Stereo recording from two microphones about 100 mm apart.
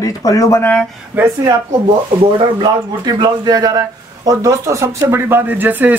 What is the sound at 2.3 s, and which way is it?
Speech, 50° right (ahead or behind).